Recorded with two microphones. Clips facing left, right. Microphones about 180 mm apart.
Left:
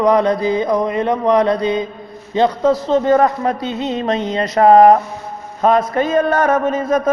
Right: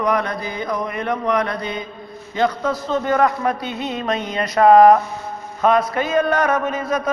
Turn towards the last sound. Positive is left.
turn(degrees=50)  # may be behind; listen again after turning